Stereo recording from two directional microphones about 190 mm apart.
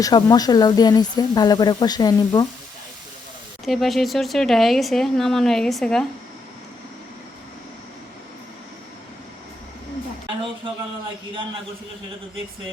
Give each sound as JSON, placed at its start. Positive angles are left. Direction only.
{"t": 0.0, "sound": "speech", "side_deg": 20}
{"t": 3.7, "sound": "speech", "side_deg": 0}